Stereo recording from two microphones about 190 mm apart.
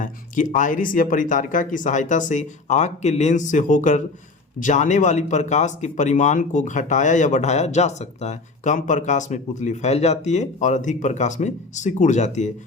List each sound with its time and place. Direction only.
0.0 s speech: 45° left (ahead or behind)